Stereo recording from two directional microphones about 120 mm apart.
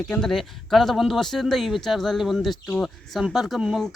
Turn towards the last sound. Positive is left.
turn(degrees=-5)  # may be behind; listen again after turning